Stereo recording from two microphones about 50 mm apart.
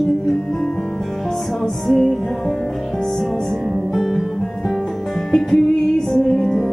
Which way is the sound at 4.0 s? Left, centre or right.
Centre.